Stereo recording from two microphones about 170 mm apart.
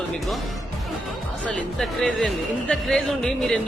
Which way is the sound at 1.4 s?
5° left (ahead or behind).